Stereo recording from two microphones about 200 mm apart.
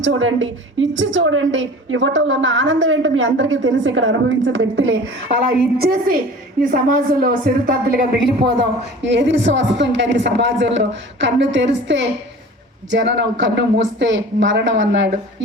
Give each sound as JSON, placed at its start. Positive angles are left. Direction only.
{"t": 0.0, "sound": "a woman's voice", "side_deg": -70}
{"t": 5.7, "sound": "speech", "side_deg": -50}
{"t": 9.0, "sound": "speech", "side_deg": -60}